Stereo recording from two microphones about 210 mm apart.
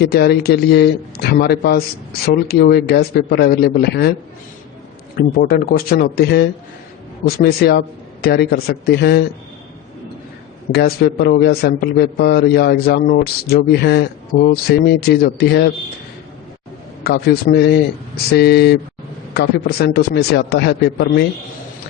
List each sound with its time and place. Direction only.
0.0 s a man's voice: 50° left (ahead or behind)
5.1 s a man's voice: 45° left (ahead or behind)
10.7 s a man's voice: 50° left (ahead or behind)
17.0 s a man's voice: 50° left (ahead or behind)